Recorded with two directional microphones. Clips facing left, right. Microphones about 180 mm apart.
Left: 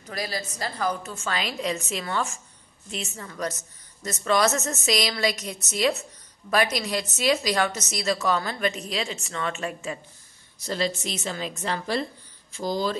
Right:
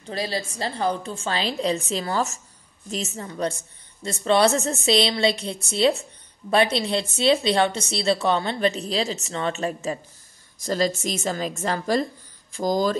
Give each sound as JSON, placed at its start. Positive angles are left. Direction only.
{"t": 0.0, "sound": "a woman's voice", "side_deg": -30}